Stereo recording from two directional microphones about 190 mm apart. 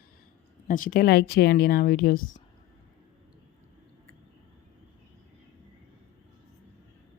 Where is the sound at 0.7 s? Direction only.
45° left (ahead or behind).